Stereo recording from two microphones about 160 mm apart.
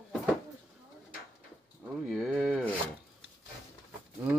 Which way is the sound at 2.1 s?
5° right (ahead or behind).